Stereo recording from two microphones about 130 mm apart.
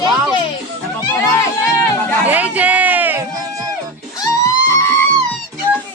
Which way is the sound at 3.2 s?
25° right (ahead or behind).